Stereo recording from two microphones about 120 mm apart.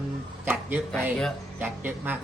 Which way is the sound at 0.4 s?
15° right (ahead or behind).